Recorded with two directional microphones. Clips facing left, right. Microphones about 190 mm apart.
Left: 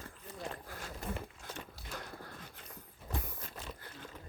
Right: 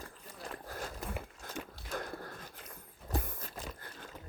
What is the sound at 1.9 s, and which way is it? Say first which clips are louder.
Biting: right 7 dB; 45° right (ahead or behind).